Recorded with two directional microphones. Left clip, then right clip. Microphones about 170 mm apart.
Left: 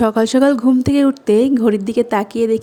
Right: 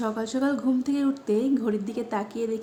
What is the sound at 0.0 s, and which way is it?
A woman's voice, 60° left (ahead or behind).